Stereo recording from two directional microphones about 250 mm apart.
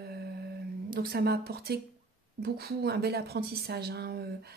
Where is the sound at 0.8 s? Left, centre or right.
Right.